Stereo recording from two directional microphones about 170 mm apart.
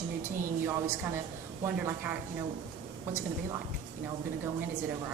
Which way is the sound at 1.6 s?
15° right (ahead or behind).